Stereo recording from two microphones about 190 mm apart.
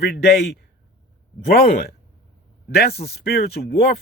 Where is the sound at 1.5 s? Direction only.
50° left (ahead or behind).